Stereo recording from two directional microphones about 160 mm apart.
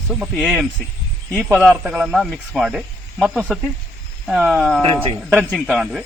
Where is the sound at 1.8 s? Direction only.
5° right (ahead or behind).